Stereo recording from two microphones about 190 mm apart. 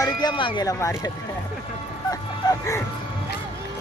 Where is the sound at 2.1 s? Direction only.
15° left (ahead or behind).